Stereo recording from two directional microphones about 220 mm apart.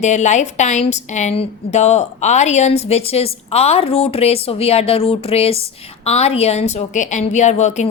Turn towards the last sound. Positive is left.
turn(degrees=30)  # may be behind; listen again after turning